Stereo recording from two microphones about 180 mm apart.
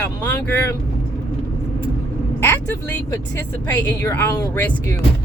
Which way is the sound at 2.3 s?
10° left (ahead or behind).